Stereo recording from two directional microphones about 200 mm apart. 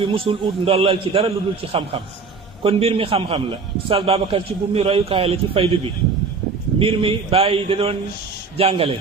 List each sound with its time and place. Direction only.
0.0 s a man's voice: 25° right (ahead or behind)